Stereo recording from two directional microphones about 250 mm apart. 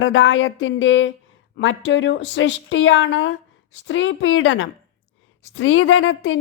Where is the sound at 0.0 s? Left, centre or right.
Left.